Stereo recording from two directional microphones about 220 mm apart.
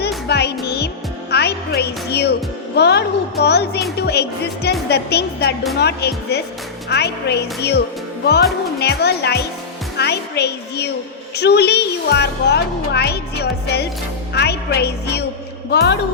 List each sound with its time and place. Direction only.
0.3 s music: 50° left (ahead or behind)
2.7 s a woman's voice: 50° left (ahead or behind)
8.8 s a woman's voice: 45° left (ahead or behind)